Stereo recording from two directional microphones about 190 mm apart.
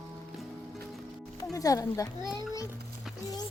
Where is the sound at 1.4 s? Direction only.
20° left (ahead or behind).